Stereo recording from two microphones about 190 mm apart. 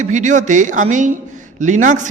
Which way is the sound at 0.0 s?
40° right (ahead or behind).